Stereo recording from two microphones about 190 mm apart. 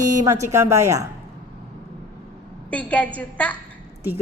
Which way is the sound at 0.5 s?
15° right (ahead or behind).